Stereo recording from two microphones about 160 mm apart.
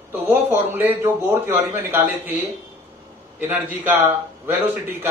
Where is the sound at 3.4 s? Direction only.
10° right (ahead or behind).